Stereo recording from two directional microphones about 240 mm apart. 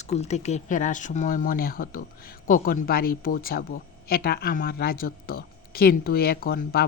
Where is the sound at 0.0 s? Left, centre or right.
Left.